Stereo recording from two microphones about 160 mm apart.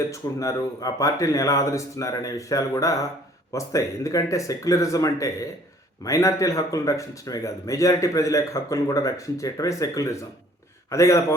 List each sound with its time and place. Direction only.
0.1 s speech: 20° left (ahead or behind)